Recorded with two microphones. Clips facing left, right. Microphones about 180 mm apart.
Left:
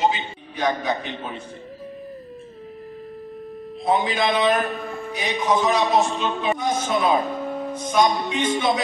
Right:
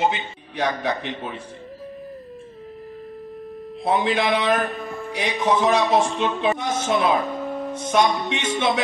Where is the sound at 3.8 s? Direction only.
75° right (ahead or behind).